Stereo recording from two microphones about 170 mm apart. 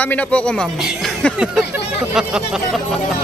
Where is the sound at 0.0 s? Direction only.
10° left (ahead or behind).